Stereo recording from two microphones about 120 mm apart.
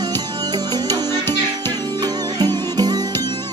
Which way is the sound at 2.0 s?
35° right (ahead or behind).